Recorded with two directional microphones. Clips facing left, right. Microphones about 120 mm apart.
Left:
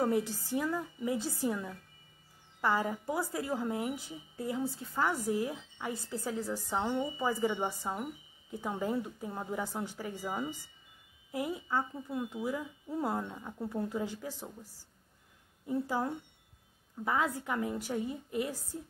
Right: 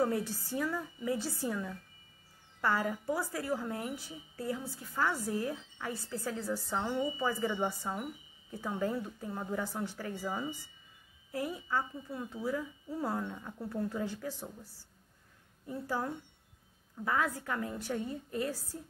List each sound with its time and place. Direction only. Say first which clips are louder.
0.0 s a woman's voice: left 1 dB; 15° left (ahead or behind)